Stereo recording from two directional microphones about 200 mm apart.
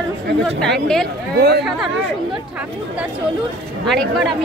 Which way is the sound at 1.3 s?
55° right (ahead or behind).